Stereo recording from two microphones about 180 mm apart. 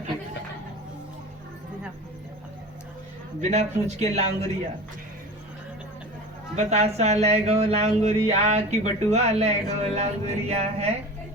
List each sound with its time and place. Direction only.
3.5 s speech: 40° right (ahead or behind)
6.6 s speech: 40° right (ahead or behind)